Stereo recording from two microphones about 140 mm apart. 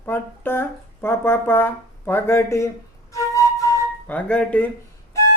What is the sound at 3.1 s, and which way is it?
Flute, 25° left (ahead or behind).